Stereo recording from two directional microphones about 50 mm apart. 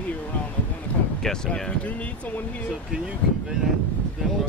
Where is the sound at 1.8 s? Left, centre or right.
Left.